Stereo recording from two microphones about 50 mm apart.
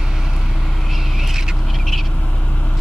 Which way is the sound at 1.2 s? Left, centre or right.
Centre.